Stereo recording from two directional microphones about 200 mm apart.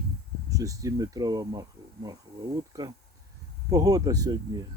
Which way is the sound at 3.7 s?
20° right (ahead or behind).